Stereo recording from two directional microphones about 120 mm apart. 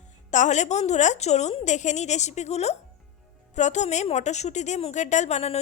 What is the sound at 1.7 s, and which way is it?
A woman's voice, 85° left.